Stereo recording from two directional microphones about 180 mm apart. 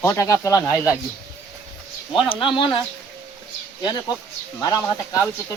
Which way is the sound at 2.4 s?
30° left (ahead or behind).